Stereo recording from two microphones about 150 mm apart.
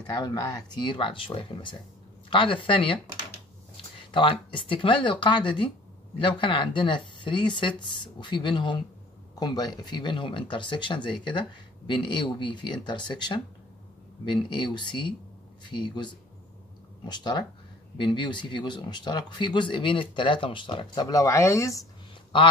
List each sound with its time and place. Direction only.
0.0 s speech: 25° left (ahead or behind)